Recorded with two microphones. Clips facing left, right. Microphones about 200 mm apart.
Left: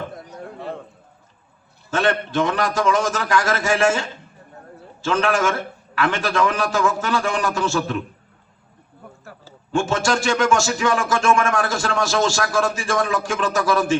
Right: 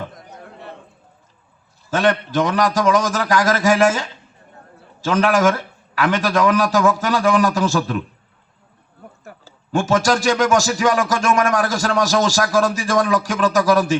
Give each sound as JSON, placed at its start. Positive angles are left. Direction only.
{"t": 1.9, "sound": "speech", "side_deg": -40}
{"t": 5.0, "sound": "speech", "side_deg": -40}
{"t": 9.7, "sound": "speech", "side_deg": -40}